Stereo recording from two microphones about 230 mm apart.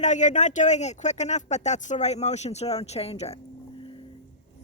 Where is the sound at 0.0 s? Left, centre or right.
Left.